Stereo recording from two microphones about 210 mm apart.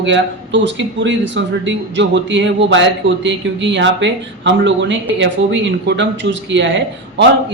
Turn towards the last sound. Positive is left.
turn(degrees=-60)  # may be behind; listen again after turning